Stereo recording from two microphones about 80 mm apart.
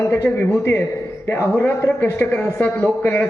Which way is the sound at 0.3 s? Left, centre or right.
Left.